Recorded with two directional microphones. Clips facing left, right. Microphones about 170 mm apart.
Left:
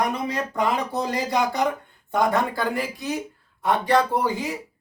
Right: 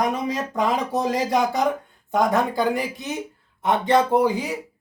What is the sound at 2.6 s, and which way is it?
Speech, 20° right (ahead or behind).